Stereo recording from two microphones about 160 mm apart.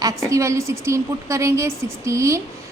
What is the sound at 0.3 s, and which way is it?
A woman's voice, 20° right (ahead or behind).